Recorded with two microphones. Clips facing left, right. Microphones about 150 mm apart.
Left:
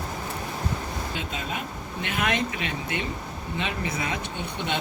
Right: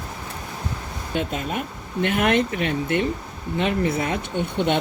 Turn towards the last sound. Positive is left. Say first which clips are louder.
# right 8 dB
turn(degrees=-55)  # may be behind; listen again after turning